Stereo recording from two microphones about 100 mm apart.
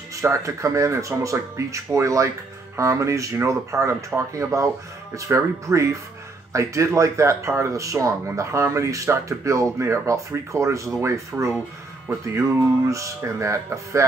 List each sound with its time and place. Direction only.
0.1 s speech: 30° right (ahead or behind)